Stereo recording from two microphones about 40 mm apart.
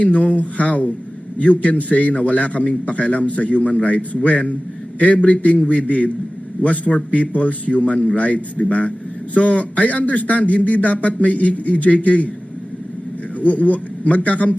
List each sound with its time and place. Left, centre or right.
0.0 s a man's voice: left
13.4 s a man's voice: left